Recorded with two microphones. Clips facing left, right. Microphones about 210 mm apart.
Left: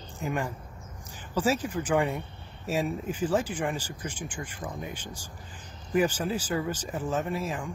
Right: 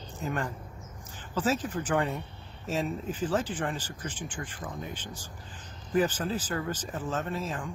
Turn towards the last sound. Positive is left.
turn(degrees=10)  # may be behind; listen again after turning